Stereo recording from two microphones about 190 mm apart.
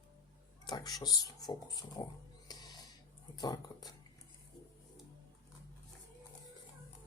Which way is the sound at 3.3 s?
20° left (ahead or behind).